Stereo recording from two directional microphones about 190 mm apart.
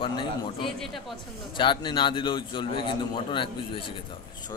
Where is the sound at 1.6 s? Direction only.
25° left (ahead or behind).